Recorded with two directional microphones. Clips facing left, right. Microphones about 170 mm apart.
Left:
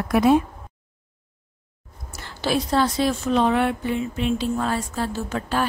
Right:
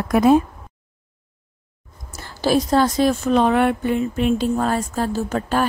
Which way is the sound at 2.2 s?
40° right (ahead or behind).